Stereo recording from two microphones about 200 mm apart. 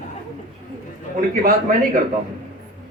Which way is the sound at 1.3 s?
45° right (ahead or behind).